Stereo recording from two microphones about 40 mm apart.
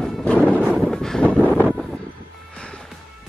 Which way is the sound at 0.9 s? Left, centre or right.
Centre.